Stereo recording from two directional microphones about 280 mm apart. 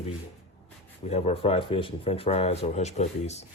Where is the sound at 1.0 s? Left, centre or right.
Left.